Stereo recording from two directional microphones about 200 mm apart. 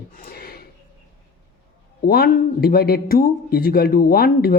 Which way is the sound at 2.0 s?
50° left (ahead or behind).